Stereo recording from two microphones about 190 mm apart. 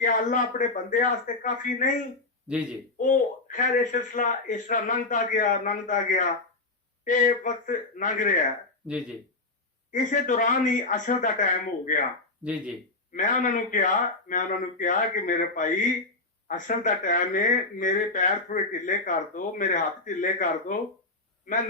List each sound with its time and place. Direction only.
0.0 s speech: 45° left (ahead or behind)
2.5 s speech: 5° right (ahead or behind)
3.0 s speech: 45° left (ahead or behind)
9.9 s speech: 40° left (ahead or behind)
12.4 s speech: 5° right (ahead or behind)
13.1 s speech: 45° left (ahead or behind)